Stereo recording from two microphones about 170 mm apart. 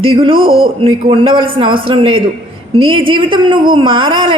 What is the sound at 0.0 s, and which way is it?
A woman's voice, 30° right (ahead or behind).